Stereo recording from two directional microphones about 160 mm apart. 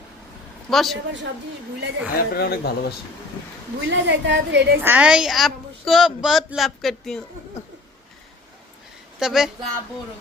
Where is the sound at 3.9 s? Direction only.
90° right.